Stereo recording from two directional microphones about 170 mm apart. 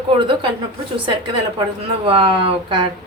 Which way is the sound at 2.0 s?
30° right (ahead or behind).